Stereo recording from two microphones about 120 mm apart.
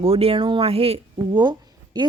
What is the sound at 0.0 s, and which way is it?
A woman's voice, 55° right (ahead or behind).